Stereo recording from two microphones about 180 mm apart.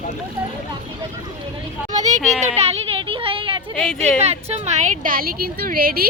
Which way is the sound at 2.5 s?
35° right (ahead or behind).